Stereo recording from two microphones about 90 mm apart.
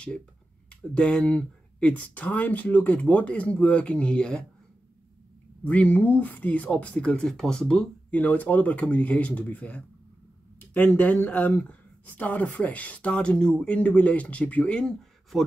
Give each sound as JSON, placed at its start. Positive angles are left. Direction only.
{"t": 0.7, "sound": "speech", "side_deg": 10}
{"t": 5.7, "sound": "speech", "side_deg": 15}